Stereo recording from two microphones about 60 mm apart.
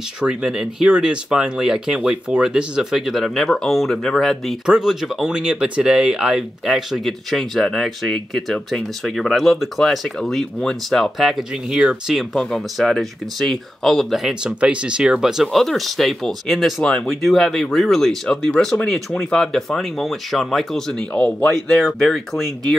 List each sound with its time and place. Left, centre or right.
0.2 s speech: centre
4.6 s speech: centre
6.6 s speech: centre
12.4 s speech: centre
14.4 s speech: centre